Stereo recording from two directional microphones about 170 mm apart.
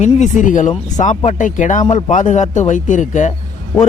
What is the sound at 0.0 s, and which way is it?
A man's voice, 45° left (ahead or behind).